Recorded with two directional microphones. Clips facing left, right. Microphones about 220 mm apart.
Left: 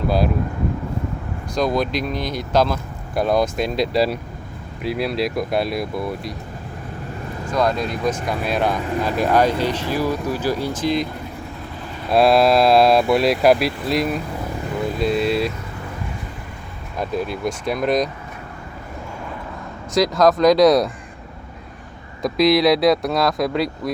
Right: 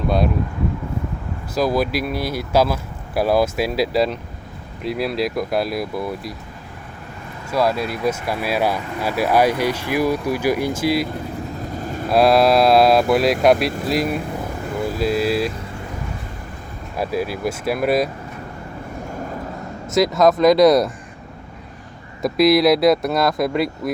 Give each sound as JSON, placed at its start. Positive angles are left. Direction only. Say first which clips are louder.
{"t": 1.5, "sound": "speech", "louder": "right 1 dB", "side_deg": -5}
{"t": 7.5, "sound": "speech", "louder": "right 1 dB", "side_deg": -5}
{"t": 11.8, "sound": "vehicle", "louder": "right 6 dB", "side_deg": -45}
{"t": 12.0, "sound": "speech", "louder": "even", "side_deg": 0}
{"t": 17.0, "sound": "speech", "louder": "right 1 dB", "side_deg": -5}
{"t": 19.9, "sound": "speech", "louder": "right 1 dB", "side_deg": 0}
{"t": 22.2, "sound": "speech", "louder": "right 1 dB", "side_deg": -5}